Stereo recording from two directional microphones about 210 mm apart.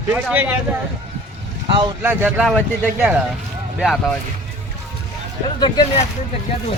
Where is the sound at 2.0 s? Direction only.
10° right (ahead or behind).